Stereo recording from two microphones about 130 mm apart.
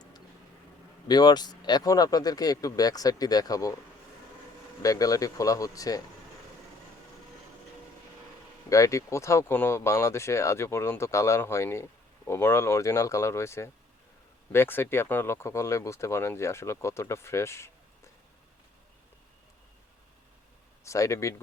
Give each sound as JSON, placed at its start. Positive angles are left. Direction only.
{"t": 1.0, "sound": "speech", "side_deg": 30}
{"t": 4.8, "sound": "speech", "side_deg": 25}
{"t": 8.7, "sound": "speech", "side_deg": 25}
{"t": 20.8, "sound": "speech", "side_deg": 25}